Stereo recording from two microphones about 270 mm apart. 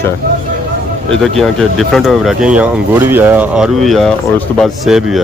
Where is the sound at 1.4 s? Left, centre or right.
Centre.